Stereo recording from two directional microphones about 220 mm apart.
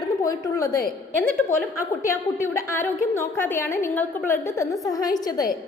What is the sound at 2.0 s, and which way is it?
A woman's voice, 15° left (ahead or behind).